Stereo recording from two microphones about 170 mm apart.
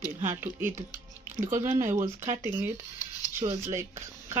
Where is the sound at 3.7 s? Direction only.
15° right (ahead or behind).